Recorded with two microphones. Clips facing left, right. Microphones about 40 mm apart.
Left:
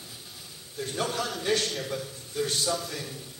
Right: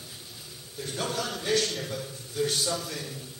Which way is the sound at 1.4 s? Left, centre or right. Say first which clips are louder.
Right 1 dB; left.